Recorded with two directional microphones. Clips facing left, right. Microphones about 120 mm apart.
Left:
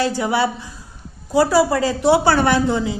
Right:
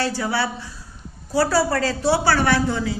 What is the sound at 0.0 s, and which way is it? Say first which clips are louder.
A woman's voice: left 4 dB; 20° left (ahead or behind).